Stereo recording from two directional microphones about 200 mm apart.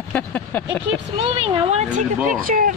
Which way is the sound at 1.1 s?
30° right (ahead or behind).